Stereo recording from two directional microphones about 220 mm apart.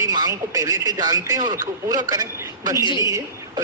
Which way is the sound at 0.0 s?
15° right (ahead or behind).